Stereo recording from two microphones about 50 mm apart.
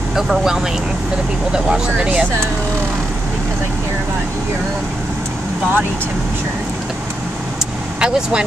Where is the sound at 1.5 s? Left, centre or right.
Centre.